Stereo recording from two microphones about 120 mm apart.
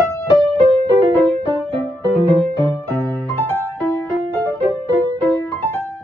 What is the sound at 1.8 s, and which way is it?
Music, 10° left (ahead or behind).